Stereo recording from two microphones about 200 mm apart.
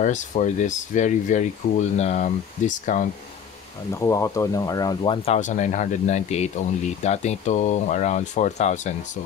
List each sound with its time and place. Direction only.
0.0 s speech: 35° left (ahead or behind)
3.9 s speech: 15° left (ahead or behind); by 8.9 s 35° left (ahead or behind)